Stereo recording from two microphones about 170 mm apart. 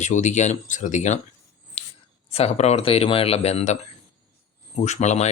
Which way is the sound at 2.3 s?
40° left (ahead or behind).